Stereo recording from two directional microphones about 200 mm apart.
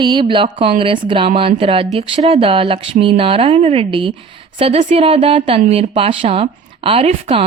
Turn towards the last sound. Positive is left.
turn(degrees=-30)  # may be behind; listen again after turning